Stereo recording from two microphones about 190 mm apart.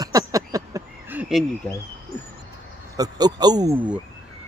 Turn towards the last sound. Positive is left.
turn(degrees=-5)  # may be behind; listen again after turning